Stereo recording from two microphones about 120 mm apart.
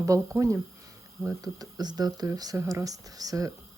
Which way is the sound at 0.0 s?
25° right (ahead or behind).